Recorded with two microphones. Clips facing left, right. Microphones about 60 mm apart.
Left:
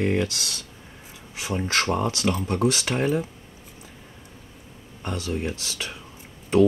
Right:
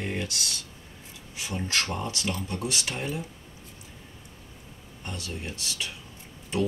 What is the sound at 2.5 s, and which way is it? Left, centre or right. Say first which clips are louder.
Speech: left 8 dB; left.